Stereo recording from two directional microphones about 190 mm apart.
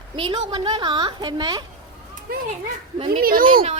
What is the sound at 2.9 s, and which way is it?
Speech, 25° right (ahead or behind).